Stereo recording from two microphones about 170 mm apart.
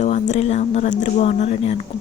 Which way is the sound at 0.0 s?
45° left (ahead or behind).